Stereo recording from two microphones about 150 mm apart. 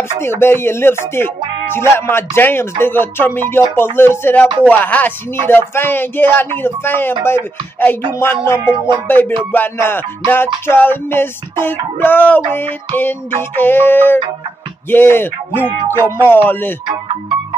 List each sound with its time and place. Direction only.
0.2 s music: 15° left (ahead or behind)